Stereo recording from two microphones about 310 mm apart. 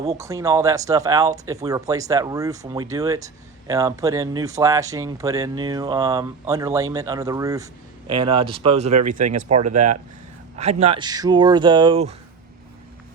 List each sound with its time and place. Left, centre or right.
0.0 s speech: centre